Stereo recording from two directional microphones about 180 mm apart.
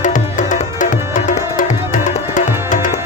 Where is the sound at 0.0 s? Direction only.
45° left (ahead or behind).